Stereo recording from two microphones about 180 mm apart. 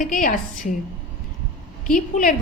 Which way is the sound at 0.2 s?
45° left (ahead or behind).